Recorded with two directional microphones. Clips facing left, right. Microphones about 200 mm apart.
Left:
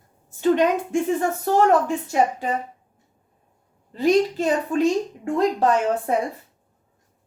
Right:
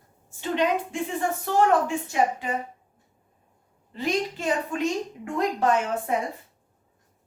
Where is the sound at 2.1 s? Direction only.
40° left (ahead or behind).